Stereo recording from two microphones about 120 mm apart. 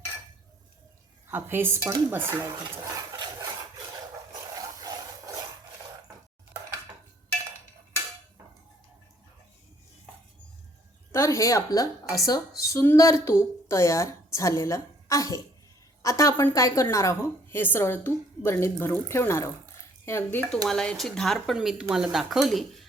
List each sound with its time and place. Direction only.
1.3 s a woman's voice: 20° right (ahead or behind)
2.4 s stir: 35° right (ahead or behind)
2.7 s speech: 30° right (ahead or behind)
4.3 s dog: 30° right (ahead or behind)
11.1 s a woman's voice: 25° left (ahead or behind)
20.7 s speech: 5° left (ahead or behind)